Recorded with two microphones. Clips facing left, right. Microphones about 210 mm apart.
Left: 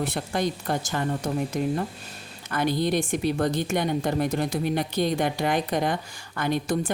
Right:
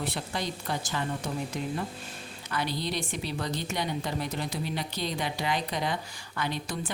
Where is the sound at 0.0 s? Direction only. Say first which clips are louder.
Left 7 dB; 50° left (ahead or behind).